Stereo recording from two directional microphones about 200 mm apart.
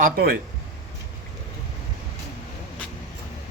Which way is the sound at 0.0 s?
50° right (ahead or behind).